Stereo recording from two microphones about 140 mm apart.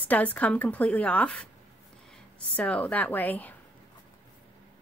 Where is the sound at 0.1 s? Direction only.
10° left (ahead or behind).